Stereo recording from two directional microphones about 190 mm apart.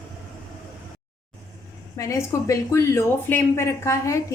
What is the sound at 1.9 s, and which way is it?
Speech, 15° left (ahead or behind).